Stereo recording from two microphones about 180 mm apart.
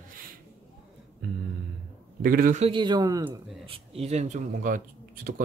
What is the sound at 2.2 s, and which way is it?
Speech, 50° right (ahead or behind).